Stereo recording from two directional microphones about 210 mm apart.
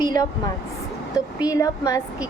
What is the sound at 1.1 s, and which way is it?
Speech, 15° left (ahead or behind).